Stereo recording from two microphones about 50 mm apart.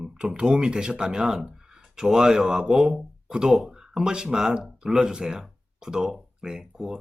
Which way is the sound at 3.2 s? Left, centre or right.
Centre.